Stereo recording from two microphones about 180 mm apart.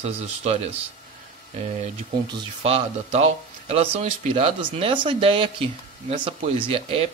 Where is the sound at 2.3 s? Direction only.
30° right (ahead or behind).